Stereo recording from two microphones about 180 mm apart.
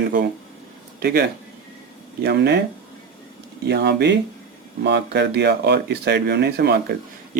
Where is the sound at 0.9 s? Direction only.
60° right (ahead or behind).